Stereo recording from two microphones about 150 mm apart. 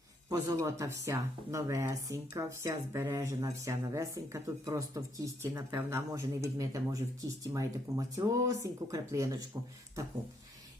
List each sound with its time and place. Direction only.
0.3 s speech: 20° right (ahead or behind)